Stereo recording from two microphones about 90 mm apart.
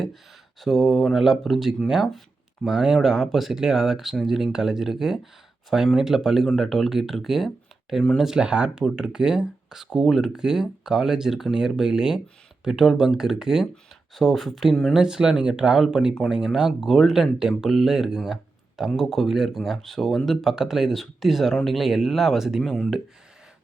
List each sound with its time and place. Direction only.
0.6 s speech: centre (ahead or behind)